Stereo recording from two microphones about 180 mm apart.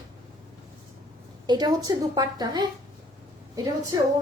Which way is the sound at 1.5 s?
20° right (ahead or behind).